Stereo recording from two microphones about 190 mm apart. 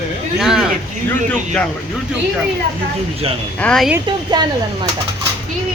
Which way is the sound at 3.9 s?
20° right (ahead or behind).